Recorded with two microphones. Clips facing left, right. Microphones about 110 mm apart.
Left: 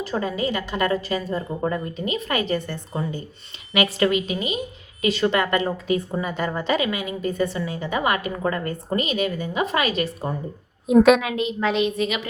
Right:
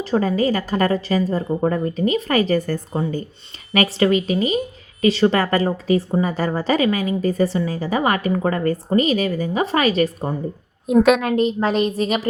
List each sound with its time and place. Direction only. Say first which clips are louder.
0.0 s a woman's voice: right 6 dB; 35° right (ahead or behind)
10.8 s a woman's voice: even; centre (ahead or behind)
11.3 s a woman's voice: right 4 dB; 40° right (ahead or behind)